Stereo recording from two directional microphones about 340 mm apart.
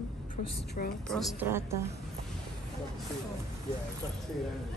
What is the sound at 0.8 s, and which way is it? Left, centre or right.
Speech, left.